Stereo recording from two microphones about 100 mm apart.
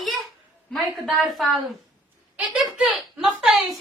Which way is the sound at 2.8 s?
5° right (ahead or behind).